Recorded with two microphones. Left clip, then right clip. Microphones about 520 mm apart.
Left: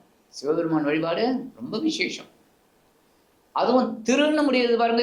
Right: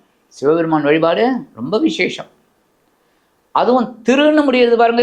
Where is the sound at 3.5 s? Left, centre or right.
Right.